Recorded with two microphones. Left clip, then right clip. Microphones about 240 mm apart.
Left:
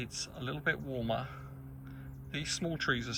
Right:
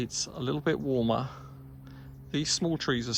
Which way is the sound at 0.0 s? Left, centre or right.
Centre.